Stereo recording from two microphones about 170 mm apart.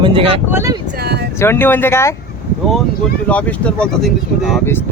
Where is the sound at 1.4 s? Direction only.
15° left (ahead or behind).